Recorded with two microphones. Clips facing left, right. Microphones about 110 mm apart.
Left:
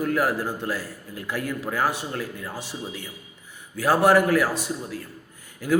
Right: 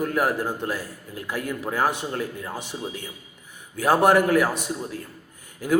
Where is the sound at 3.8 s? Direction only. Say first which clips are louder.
Even; 20° right (ahead or behind).